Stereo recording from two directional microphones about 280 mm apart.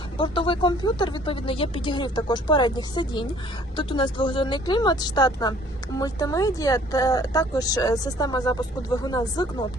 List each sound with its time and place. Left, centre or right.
0.2 s speech: centre